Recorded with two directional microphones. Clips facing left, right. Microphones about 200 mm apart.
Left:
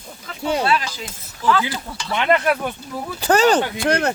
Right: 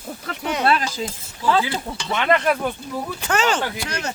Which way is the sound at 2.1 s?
15° left (ahead or behind).